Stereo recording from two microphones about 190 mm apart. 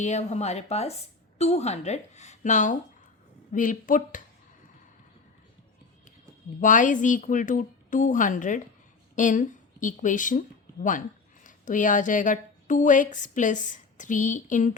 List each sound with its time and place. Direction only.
0.0 s a woman's voice: 35° left (ahead or behind)
6.6 s a woman's voice: 40° left (ahead or behind)
11.4 s speech: 40° left (ahead or behind)